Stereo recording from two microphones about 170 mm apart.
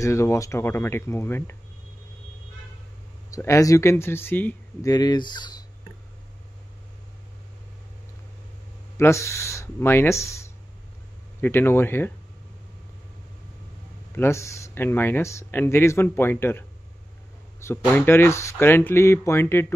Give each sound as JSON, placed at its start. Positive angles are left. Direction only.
{"t": 0.0, "sound": "speech", "side_deg": 15}
{"t": 3.3, "sound": "speech", "side_deg": 20}
{"t": 4.9, "sound": "speech", "side_deg": 25}
{"t": 8.9, "sound": "speech", "side_deg": 15}
{"t": 14.1, "sound": "speech", "side_deg": 15}